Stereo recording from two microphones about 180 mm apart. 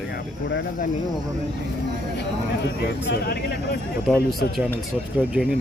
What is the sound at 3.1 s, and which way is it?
Speech, 60° left (ahead or behind).